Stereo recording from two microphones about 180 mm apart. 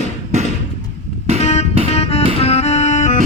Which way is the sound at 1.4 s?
35° left (ahead or behind).